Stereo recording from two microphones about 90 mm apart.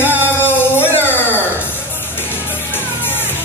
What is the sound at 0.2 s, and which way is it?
Music, 25° left (ahead or behind).